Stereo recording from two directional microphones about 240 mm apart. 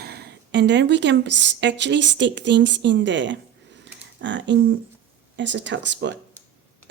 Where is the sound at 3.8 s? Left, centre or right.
Right.